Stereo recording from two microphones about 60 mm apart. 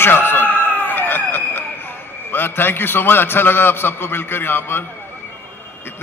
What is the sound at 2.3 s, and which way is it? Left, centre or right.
A man's voice, left.